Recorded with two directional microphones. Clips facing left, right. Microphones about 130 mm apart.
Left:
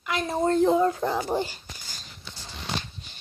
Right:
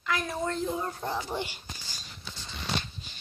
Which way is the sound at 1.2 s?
40° left (ahead or behind).